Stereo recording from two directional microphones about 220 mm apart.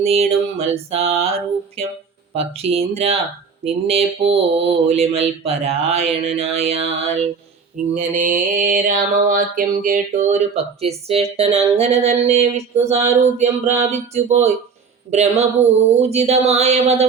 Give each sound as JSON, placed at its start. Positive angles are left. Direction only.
{"t": 0.0, "sound": "mantra", "side_deg": -25}
{"t": 7.9, "sound": "mantra", "side_deg": -35}